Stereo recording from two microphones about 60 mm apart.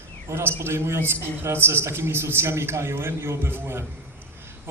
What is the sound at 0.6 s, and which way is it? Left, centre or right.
A man's voice, right.